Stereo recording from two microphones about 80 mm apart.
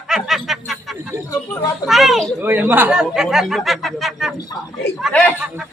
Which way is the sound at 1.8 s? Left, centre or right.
Centre.